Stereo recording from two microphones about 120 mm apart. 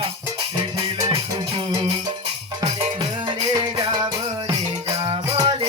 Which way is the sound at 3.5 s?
30° right (ahead or behind).